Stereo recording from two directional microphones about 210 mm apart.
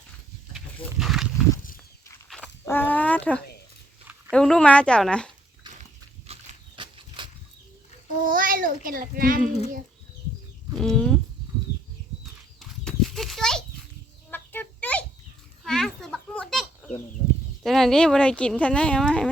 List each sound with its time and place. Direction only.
0.5 s wild animals: centre (ahead or behind)
2.3 s dog: 10° left (ahead or behind)
4.3 s speech: 5° left (ahead or behind)
6.2 s horse: 30° right (ahead or behind)
8.3 s a child's voice: 40° right (ahead or behind)
10.8 s speech: centre (ahead or behind)
12.2 s horse: centre (ahead or behind)
14.3 s a sound: 10° left (ahead or behind)
17.6 s speech: centre (ahead or behind)